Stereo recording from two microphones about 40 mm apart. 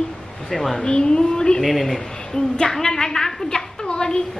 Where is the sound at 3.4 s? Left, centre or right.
Centre.